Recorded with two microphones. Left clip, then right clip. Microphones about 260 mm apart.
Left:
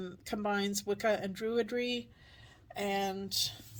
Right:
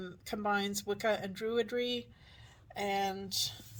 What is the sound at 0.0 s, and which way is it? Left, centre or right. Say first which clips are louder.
Speech: even; left.